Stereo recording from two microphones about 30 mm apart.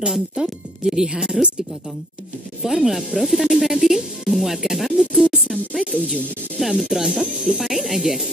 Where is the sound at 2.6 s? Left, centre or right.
Centre.